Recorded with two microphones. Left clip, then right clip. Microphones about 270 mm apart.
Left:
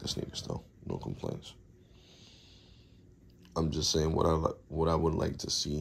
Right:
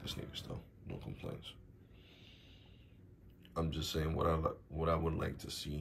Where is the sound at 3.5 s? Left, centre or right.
Centre.